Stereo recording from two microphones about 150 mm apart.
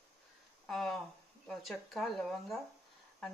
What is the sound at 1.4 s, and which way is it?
Speech, centre (ahead or behind).